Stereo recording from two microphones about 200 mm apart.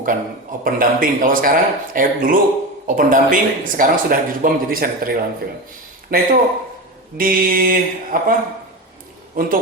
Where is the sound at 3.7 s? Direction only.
45° right (ahead or behind).